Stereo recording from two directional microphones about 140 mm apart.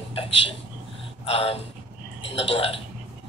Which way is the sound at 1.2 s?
45° left (ahead or behind).